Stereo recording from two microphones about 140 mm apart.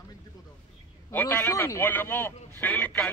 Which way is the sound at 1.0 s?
15° left (ahead or behind).